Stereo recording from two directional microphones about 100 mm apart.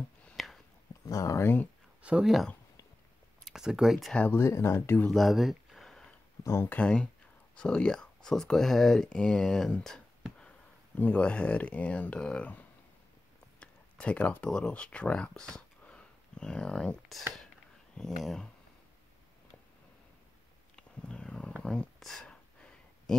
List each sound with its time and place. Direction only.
0.4 s a sound: centre (ahead or behind)
1.0 s speech: 35° left (ahead or behind)
2.0 s speech: 5° right (ahead or behind)
4.1 s speech: 15° left (ahead or behind)
4.4 s speech: 25° left (ahead or behind)
5.1 s a sound: centre (ahead or behind)
6.4 s speech: 25° left (ahead or behind); by 18.5 s 5° left (ahead or behind)
20.7 s purr: 10° left (ahead or behind)
21.6 s a sound: 5° left (ahead or behind)